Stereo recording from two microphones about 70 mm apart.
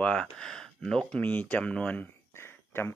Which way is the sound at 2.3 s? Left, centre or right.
Left.